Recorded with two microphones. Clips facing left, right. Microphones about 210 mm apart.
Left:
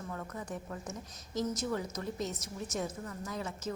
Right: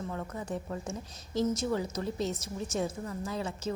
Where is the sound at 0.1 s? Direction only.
30° right (ahead or behind).